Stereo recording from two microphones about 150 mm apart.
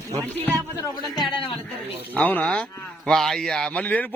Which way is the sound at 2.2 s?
10° left (ahead or behind).